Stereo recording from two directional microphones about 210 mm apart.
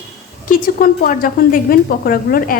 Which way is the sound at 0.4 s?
40° left (ahead or behind).